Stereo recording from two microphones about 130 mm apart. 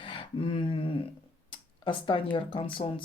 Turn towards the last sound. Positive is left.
turn(degrees=40)  # may be behind; listen again after turning